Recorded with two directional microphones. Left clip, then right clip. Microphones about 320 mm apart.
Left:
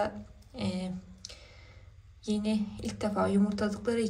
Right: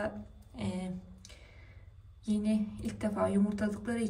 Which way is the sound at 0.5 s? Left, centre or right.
Centre.